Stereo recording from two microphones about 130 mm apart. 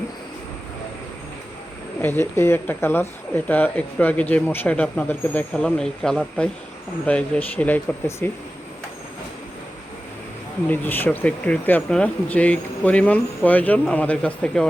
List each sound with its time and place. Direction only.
2.0 s speech: 15° left (ahead or behind)
10.7 s speech: 15° left (ahead or behind)